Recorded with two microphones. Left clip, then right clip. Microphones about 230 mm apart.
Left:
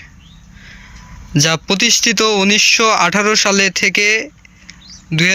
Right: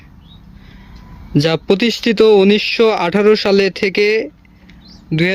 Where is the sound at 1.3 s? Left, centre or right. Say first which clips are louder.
Right 1 dB; centre.